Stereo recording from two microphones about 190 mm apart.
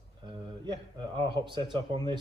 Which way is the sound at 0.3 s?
25° right (ahead or behind).